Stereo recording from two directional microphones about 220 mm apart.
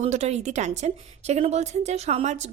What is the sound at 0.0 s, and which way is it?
A woman's voice, 30° right (ahead or behind).